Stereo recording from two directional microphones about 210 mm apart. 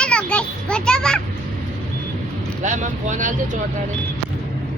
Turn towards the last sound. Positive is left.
turn(degrees=-35)  # may be behind; listen again after turning